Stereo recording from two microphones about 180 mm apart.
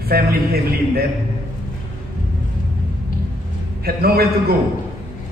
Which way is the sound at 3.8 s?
60° right (ahead or behind).